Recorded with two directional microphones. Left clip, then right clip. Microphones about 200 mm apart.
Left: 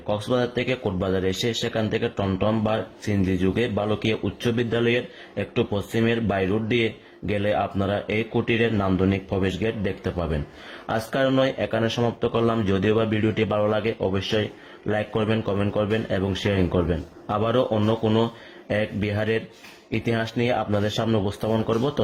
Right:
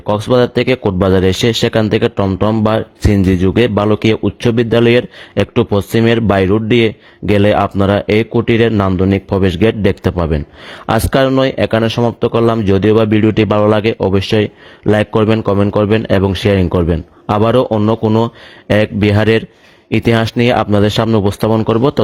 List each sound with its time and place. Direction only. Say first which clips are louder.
0.3 s a man's voice: right 13 dB; 45° right (ahead or behind)